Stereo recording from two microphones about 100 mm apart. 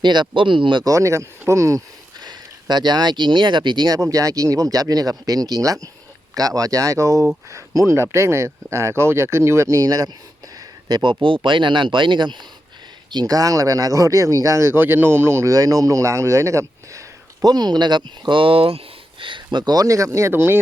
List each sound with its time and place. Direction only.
0.0 s speech: 50° right (ahead or behind)
0.9 s speech: 30° right (ahead or behind)
2.2 s speech: 45° right (ahead or behind)
13.1 s speech: 40° right (ahead or behind)
17.4 s speech: 40° right (ahead or behind); by 18.8 s 70° right (ahead or behind)
19.2 s speech: 50° right (ahead or behind); by 20.6 s 20° right (ahead or behind)